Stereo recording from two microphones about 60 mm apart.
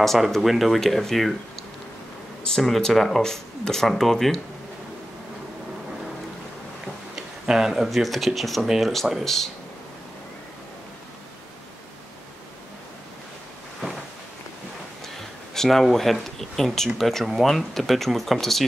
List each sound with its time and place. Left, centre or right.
0.0 s speech: centre
2.4 s speech: centre
7.4 s speech: centre
15.5 s speech: centre